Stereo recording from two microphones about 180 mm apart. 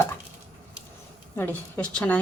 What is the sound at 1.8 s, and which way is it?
Speech, 5° left (ahead or behind).